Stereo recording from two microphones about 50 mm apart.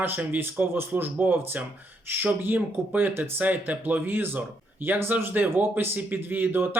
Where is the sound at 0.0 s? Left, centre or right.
Right.